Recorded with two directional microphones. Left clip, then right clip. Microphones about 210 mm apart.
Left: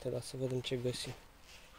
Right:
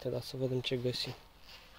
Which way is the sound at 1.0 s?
20° right (ahead or behind).